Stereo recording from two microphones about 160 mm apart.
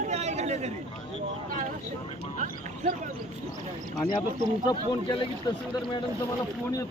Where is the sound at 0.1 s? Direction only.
45° right (ahead or behind).